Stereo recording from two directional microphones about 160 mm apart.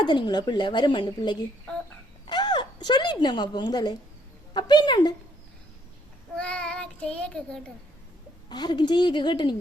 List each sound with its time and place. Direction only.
0.0 s speech: 30° left (ahead or behind)
6.3 s child singing: 5° left (ahead or behind)
8.4 s speech: 25° left (ahead or behind)